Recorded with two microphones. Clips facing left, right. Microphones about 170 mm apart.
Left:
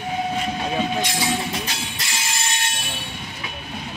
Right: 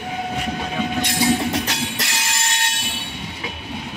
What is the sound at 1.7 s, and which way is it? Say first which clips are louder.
Music: right 5 dB; 75° right (ahead or behind).